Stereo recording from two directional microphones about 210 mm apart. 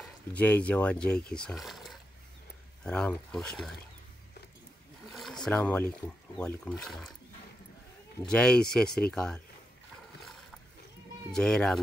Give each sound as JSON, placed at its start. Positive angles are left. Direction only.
{"t": 0.0, "sound": "speech", "side_deg": 5}
{"t": 5.1, "sound": "a sound", "side_deg": 0}
{"t": 6.3, "sound": "speech", "side_deg": 5}
{"t": 8.2, "sound": "speech", "side_deg": 5}
{"t": 11.3, "sound": "speech", "side_deg": 5}